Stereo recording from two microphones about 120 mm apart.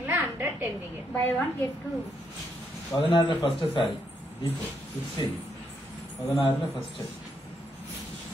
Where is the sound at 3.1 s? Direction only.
45° left (ahead or behind).